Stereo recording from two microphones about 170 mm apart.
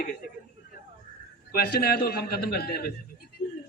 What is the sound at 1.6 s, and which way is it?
A man's voice, 60° left (ahead or behind).